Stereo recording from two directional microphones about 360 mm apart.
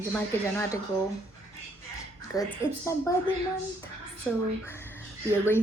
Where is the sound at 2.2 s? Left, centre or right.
Centre.